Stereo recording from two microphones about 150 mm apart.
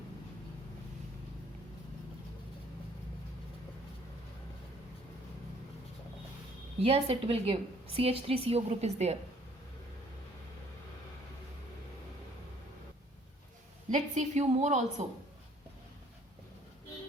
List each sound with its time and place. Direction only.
6.8 s a woman's voice: 40° right (ahead or behind)
13.9 s a woman's voice: 50° right (ahead or behind)